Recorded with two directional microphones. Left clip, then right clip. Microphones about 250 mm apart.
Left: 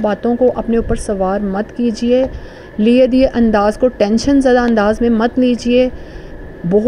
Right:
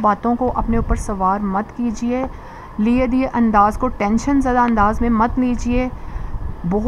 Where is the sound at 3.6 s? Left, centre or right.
Centre.